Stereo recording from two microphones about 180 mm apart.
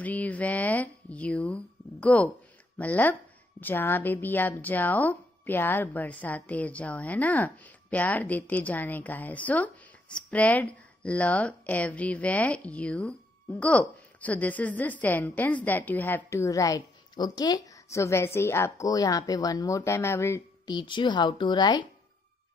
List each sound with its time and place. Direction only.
0.0 s a woman's voice: 10° left (ahead or behind); by 21.8 s 25° left (ahead or behind)